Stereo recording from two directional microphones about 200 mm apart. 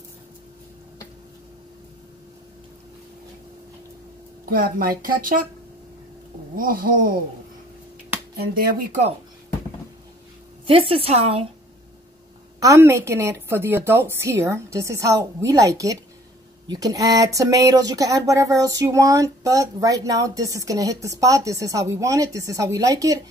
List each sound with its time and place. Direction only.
4.5 s speech: 45° right (ahead or behind)
6.5 s speech: 45° right (ahead or behind)
8.4 s speech: 50° right (ahead or behind)
10.7 s a woman's voice: 25° right (ahead or behind)
12.5 s speech: 15° right (ahead or behind)